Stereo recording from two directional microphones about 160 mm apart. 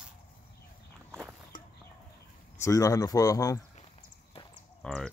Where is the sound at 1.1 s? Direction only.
15° right (ahead or behind).